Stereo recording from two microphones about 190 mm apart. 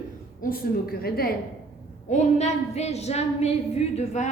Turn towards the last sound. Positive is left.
turn(degrees=35)  # may be behind; listen again after turning